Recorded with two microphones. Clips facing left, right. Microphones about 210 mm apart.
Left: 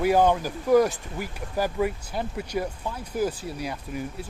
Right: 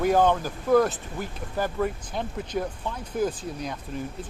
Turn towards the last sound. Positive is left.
turn(degrees=10)  # may be behind; listen again after turning